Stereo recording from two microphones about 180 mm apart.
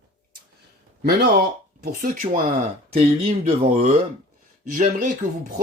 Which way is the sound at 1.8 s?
55° right (ahead or behind).